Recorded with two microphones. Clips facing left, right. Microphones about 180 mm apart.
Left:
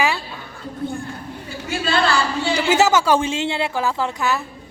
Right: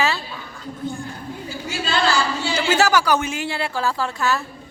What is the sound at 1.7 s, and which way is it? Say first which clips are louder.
Speech: left 2 dB; 60° left (ahead or behind).